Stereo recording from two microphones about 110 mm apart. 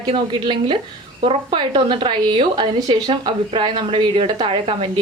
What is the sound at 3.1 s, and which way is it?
A woman's voice, 50° right (ahead or behind).